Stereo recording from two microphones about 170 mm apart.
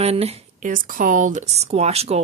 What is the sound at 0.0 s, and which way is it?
Speech, 35° right (ahead or behind).